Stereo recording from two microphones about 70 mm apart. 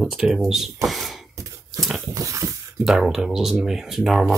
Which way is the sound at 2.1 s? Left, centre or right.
Right.